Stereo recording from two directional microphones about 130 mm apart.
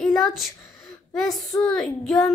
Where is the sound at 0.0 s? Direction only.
Centre (ahead or behind).